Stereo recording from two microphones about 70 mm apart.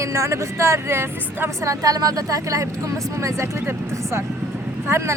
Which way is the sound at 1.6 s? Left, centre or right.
Right.